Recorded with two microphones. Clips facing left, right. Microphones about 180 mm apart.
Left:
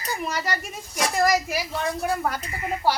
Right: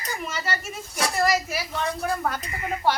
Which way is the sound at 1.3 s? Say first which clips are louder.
Left 2 dB; 10° left (ahead or behind).